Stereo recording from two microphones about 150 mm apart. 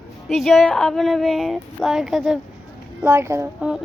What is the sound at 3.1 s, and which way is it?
Speech, 20° right (ahead or behind).